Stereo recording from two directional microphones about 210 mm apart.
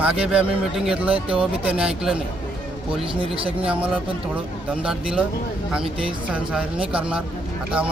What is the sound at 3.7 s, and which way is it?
Speech, 5° right (ahead or behind).